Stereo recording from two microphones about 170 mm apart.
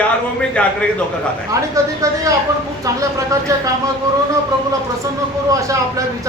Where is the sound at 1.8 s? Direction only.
20° right (ahead or behind).